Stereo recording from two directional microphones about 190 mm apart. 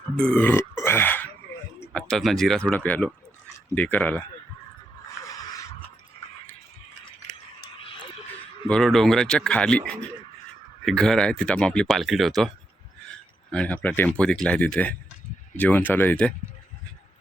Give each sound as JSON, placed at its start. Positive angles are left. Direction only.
{"t": 0.2, "sound": "grunt", "side_deg": 10}
{"t": 1.8, "sound": "speech", "side_deg": 5}
{"t": 5.2, "sound": "a sound", "side_deg": 15}
{"t": 8.6, "sound": "speech", "side_deg": 5}
{"t": 13.5, "sound": "speech", "side_deg": 5}